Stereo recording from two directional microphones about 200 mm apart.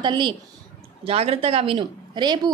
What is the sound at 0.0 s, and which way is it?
Speech, 25° right (ahead or behind).